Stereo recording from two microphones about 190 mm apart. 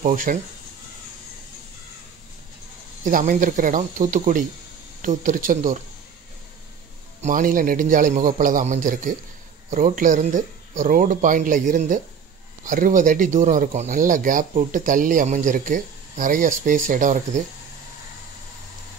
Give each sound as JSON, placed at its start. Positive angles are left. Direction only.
{"t": 0.0, "sound": "speech", "side_deg": -45}
{"t": 3.0, "sound": "speech", "side_deg": -45}
{"t": 7.2, "sound": "speech", "side_deg": -45}